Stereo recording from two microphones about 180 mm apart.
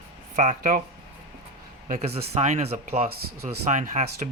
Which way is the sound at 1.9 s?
35° right (ahead or behind).